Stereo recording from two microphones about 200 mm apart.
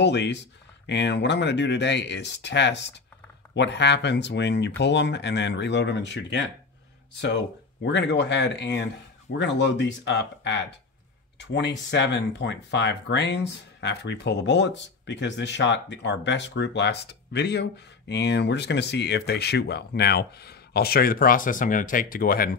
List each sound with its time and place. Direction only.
0.0 s speech: 60° left (ahead or behind)